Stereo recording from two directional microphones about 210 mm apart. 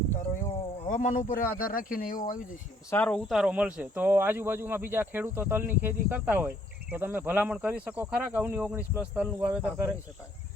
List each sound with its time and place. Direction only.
0.9 s speech: 40° left (ahead or behind)
2.9 s speech: 5° left (ahead or behind)